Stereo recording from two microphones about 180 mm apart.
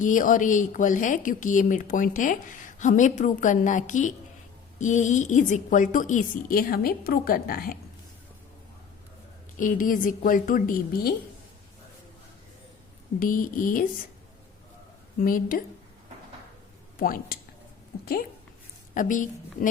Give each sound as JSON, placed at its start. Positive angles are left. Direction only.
{"t": 0.0, "sound": "a woman's voice", "side_deg": 45}
{"t": 9.6, "sound": "a woman's voice", "side_deg": 45}
{"t": 13.1, "sound": "a woman's voice", "side_deg": 50}
{"t": 15.2, "sound": "a woman's voice", "side_deg": 50}
{"t": 17.0, "sound": "a woman's voice", "side_deg": 50}